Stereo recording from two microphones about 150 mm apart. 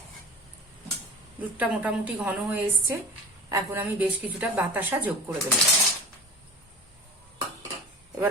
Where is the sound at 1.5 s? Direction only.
10° right (ahead or behind).